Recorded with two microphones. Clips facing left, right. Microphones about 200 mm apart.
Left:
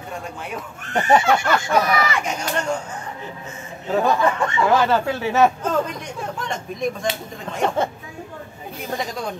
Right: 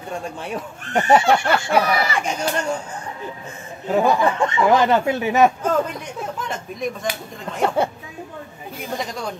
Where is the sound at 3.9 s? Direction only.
10° right (ahead or behind).